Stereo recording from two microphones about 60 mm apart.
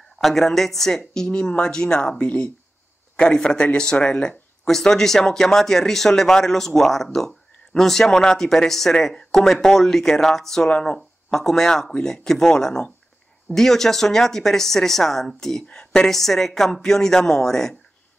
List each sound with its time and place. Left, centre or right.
0.2 s speech: centre